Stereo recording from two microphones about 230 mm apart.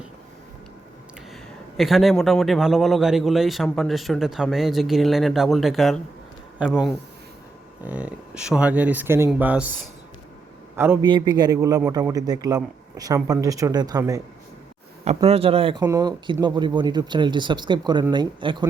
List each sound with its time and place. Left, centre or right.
1.7 s a man's voice: centre
10.8 s speech: centre